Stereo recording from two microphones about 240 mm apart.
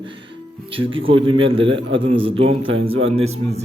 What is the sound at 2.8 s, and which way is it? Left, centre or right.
Speech, right.